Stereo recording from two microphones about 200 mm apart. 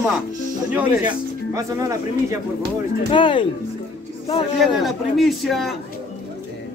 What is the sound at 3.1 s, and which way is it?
Speech, 25° left (ahead or behind).